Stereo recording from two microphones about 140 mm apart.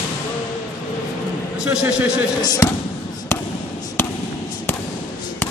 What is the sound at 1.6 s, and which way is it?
Speech, 5° right (ahead or behind).